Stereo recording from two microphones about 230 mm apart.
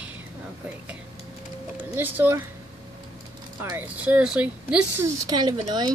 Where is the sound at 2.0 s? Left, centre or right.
Centre.